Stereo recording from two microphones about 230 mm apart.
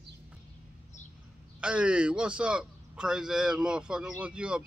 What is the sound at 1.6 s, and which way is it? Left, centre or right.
A man's voice, centre.